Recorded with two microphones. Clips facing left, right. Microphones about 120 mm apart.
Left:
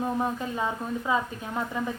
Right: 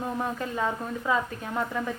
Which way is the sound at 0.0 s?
15° left (ahead or behind).